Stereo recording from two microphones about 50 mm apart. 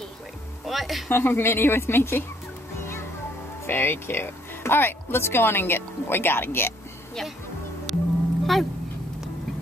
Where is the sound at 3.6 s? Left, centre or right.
Left.